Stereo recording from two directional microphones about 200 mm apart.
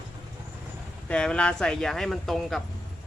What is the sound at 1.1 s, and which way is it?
Speech, 5° left (ahead or behind).